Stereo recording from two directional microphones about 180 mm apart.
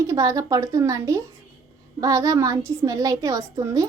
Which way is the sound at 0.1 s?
20° right (ahead or behind).